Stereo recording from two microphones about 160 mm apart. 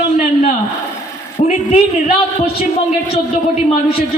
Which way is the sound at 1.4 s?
45° left (ahead or behind).